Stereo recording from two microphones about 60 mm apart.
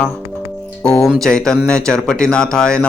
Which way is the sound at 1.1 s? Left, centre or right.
Centre.